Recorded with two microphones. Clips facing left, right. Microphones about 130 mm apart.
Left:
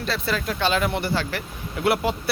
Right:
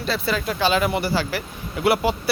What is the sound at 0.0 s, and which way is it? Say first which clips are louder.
Speech: right 2 dB; centre (ahead or behind).